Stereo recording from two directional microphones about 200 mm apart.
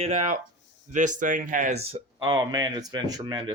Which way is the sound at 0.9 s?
40° right (ahead or behind).